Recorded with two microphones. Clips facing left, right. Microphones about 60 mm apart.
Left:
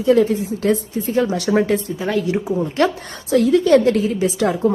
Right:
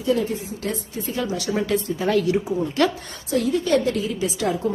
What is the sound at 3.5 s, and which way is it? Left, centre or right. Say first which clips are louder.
A woman's voice: left 8 dB; left.